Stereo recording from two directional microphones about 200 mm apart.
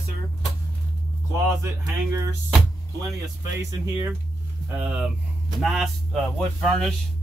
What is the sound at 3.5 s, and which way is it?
Speech, 15° right (ahead or behind).